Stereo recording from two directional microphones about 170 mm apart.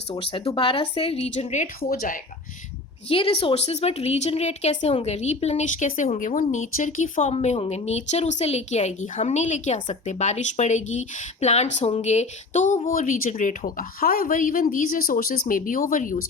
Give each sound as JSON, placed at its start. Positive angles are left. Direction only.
{"t": 0.1, "sound": "speech", "side_deg": 30}
{"t": 3.1, "sound": "a woman's voice", "side_deg": 35}